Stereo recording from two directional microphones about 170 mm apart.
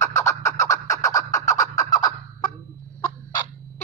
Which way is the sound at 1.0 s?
20° left (ahead or behind).